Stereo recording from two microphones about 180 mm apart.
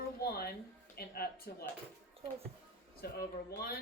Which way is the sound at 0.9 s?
60° left (ahead or behind).